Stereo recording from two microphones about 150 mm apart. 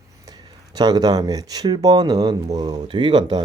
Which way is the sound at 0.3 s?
25° right (ahead or behind).